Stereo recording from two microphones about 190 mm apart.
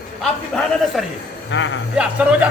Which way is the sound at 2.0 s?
5° right (ahead or behind).